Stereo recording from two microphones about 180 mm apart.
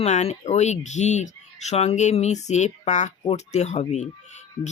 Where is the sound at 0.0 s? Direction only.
35° left (ahead or behind).